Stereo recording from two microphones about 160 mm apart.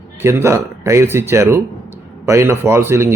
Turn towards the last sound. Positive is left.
turn(degrees=-15)  # may be behind; listen again after turning